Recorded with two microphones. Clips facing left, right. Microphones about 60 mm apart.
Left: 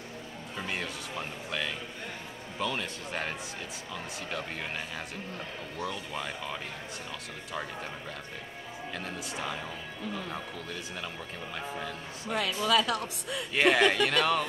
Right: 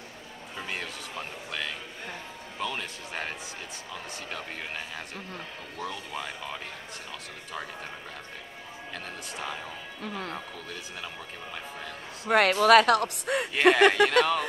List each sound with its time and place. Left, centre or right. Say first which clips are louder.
0.6 s music: even; centre
2.6 s speech: left 1 dB; centre
9.0 s speech: even; centre
10.0 s speech: right 2 dB; right
12.3 s speech: right 9 dB; right
13.6 s speech: right 4 dB; centre